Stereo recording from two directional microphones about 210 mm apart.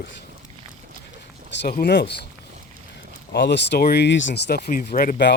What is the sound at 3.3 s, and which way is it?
Speech, 55° left (ahead or behind).